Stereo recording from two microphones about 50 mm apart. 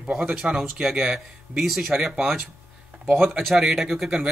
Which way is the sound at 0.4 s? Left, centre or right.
Centre.